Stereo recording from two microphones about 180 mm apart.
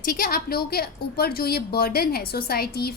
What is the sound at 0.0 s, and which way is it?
A woman's voice, 50° left (ahead or behind).